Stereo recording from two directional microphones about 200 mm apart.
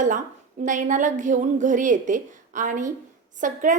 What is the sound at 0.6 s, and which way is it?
A woman's voice, 40° right (ahead or behind).